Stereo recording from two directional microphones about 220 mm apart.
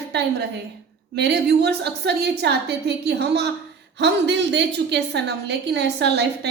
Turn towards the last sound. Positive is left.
turn(degrees=-50)  # may be behind; listen again after turning